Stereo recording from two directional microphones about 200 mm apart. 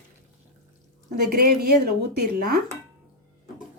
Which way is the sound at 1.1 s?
50° right (ahead or behind).